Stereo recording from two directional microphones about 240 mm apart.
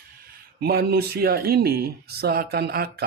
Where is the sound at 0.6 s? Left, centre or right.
Right.